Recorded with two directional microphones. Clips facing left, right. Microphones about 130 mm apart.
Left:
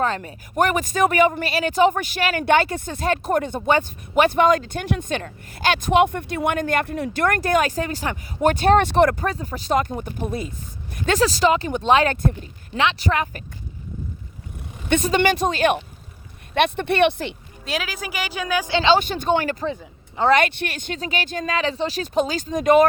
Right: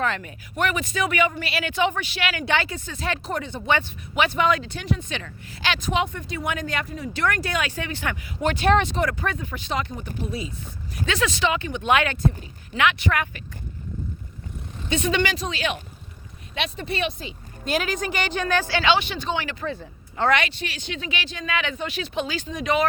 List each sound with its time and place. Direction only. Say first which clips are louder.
0.0 s speech: left 3 dB; 35° left (ahead or behind)
8.9 s speech: left 8 dB; 60° left (ahead or behind)
9.2 s speech: left 3 dB; 35° left (ahead or behind)
12.1 s speech: left 1 dB; 50° left (ahead or behind)
12.7 s speech: left 1 dB; 30° left (ahead or behind)
15.0 s speech: left 4 dB; 45° left (ahead or behind); by 17.3 s 65° left (ahead or behind)
17.7 s a woman's voice: right 3 dB; centre (ahead or behind)
18.7 s speech: left 5 dB; 25° left (ahead or behind)
18.9 s speech: left 6 dB; 45° left (ahead or behind)